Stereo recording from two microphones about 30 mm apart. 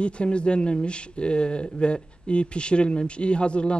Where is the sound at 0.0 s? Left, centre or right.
Left.